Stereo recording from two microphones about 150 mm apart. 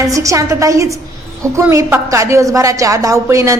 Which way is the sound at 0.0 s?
20° right (ahead or behind).